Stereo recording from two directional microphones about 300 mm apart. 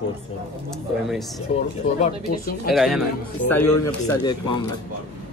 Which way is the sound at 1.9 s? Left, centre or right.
Left.